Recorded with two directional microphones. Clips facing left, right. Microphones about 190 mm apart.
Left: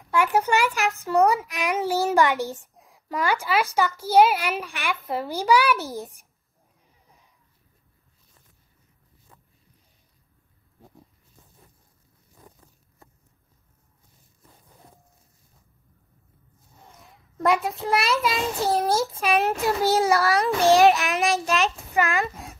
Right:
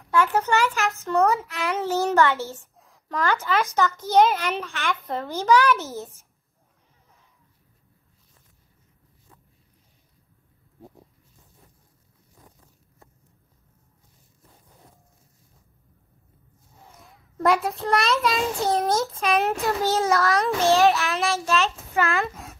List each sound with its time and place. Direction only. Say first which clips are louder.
0.1 s a child's voice: even; 15° left (ahead or behind)
17.0 s a child's voice: right 1 dB; centre (ahead or behind)
19.9 s a child's voice: left 1 dB; 15° left (ahead or behind)